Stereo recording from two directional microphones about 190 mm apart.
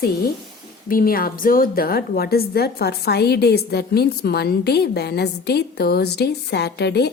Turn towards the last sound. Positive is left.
turn(degrees=60)  # may be behind; listen again after turning